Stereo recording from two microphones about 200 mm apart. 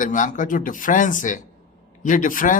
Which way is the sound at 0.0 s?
40° left (ahead or behind).